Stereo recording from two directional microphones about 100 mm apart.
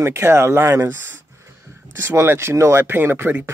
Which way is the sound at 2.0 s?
25° right (ahead or behind).